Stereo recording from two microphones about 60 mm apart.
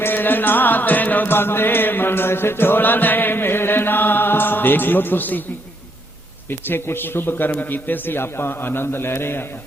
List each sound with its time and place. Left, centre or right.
0.0 s music: left
6.5 s a man's voice: left